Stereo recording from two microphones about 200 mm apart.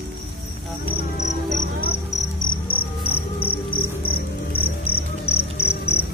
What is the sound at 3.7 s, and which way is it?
Cricket, 50° left (ahead or behind).